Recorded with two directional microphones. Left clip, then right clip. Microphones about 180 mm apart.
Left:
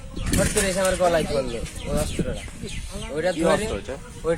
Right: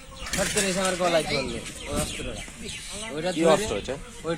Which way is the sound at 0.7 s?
Centre (ahead or behind).